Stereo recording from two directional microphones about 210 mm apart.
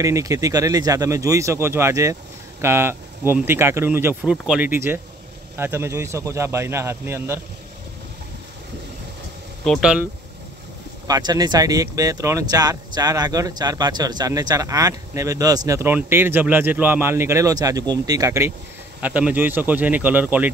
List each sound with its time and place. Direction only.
0.0 s speech: 15° right (ahead or behind)
9.7 s speech: 5° right (ahead or behind)
11.1 s speech: 20° right (ahead or behind)